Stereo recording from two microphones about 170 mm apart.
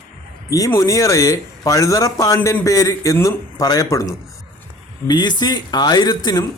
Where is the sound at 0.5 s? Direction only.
20° left (ahead or behind).